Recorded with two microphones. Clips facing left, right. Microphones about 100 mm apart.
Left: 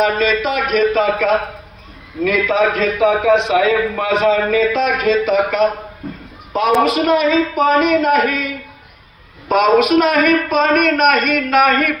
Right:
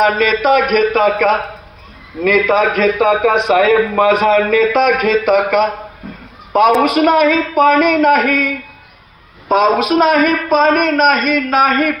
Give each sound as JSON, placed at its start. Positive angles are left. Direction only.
{"t": 0.0, "sound": "a man's voice", "side_deg": -55}
{"t": 6.8, "sound": "speech", "side_deg": -55}
{"t": 9.5, "sound": "a man's voice", "side_deg": -35}